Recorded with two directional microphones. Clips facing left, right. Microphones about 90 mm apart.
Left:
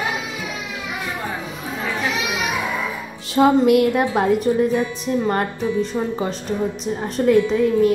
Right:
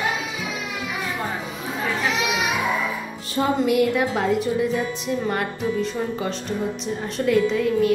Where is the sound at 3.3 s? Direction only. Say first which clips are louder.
Left 6 dB; 60° left (ahead or behind).